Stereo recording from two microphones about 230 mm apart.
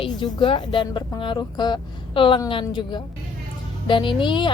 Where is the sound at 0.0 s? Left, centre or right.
Left.